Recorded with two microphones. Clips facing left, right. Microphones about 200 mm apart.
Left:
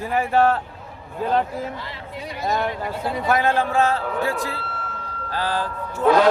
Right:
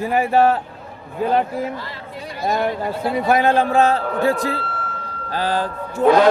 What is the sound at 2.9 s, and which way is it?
A man's voice, 10° right (ahead or behind).